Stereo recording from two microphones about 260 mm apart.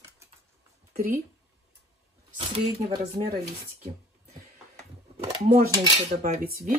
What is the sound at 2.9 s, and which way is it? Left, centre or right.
Speech, right.